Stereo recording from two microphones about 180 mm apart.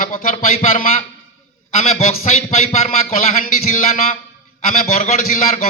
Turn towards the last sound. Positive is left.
turn(degrees=40)  # may be behind; listen again after turning